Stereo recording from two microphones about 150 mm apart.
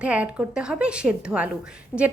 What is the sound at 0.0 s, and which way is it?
A woman's voice, 10° right (ahead or behind).